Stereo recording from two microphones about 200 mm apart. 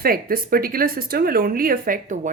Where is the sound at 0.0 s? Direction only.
45° right (ahead or behind).